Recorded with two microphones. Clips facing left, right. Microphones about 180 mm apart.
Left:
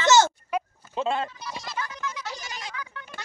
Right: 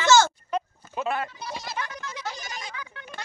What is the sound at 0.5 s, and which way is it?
Sheep, 10° left (ahead or behind).